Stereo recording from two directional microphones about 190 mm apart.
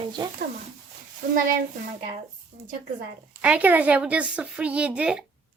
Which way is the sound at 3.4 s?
10° right (ahead or behind).